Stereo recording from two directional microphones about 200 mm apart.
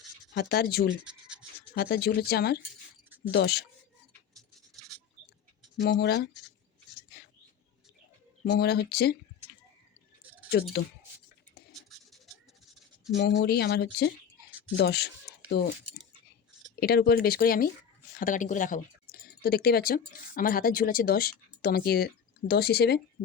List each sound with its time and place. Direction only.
0.3 s speech: 50° left (ahead or behind)
1.0 s scratch: 5° right (ahead or behind)
1.7 s speech: 50° left (ahead or behind)
5.8 s speech: 55° left (ahead or behind)
8.4 s speech: 55° left (ahead or behind)
10.5 s speech: 55° left (ahead or behind)
13.1 s speech: 55° left (ahead or behind)
16.8 s speech: 50° left (ahead or behind)